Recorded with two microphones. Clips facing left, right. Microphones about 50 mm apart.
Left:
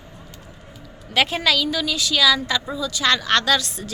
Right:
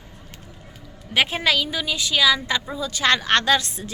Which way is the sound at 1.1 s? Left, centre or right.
Right.